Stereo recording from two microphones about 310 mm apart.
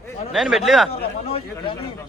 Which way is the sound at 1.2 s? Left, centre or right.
Centre.